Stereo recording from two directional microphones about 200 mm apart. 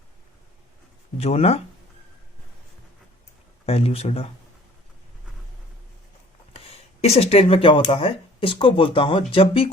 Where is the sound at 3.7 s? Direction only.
30° left (ahead or behind).